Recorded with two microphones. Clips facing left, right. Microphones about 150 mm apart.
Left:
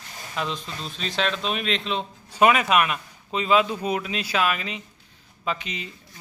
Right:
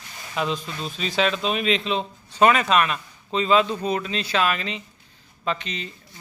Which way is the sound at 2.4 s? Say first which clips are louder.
Right 1 dB; 10° left (ahead or behind).